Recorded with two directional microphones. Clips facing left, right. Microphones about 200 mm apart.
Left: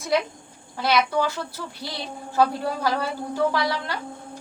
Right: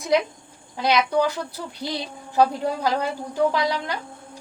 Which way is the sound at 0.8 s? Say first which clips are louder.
Right 2 dB; 15° right (ahead or behind).